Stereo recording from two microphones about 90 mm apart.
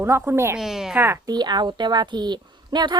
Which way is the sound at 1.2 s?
50° right (ahead or behind).